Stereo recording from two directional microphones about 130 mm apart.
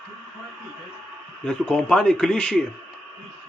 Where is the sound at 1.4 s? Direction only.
10° left (ahead or behind).